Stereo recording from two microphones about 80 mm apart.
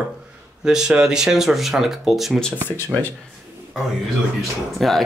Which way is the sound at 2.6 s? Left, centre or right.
Left.